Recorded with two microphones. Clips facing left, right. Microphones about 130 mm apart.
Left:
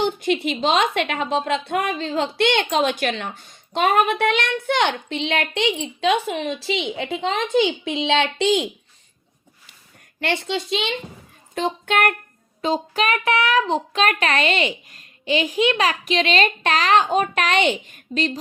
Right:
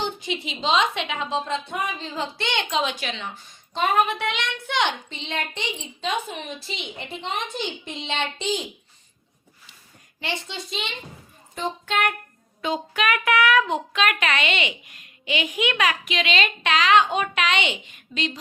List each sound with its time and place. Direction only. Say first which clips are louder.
0.0 s a woman's voice: left 8 dB; 55° left (ahead or behind); by 8.6 s 75° left (ahead or behind)
10.2 s a woman's voice: left 8 dB; 65° left (ahead or behind); by 10.9 s 90° left
11.5 s a woman's voice: left 5 dB; 65° left (ahead or behind)
12.6 s a child's voice: left 3 dB; 35° left (ahead or behind)